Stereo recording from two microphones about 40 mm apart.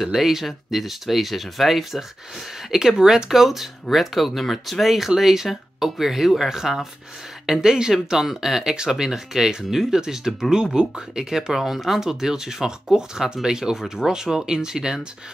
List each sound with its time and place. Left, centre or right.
0.0 s speech: centre
8.7 s speech: centre